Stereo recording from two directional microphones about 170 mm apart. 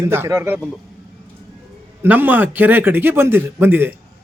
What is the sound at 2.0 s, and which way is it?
A man's voice, 10° right (ahead or behind).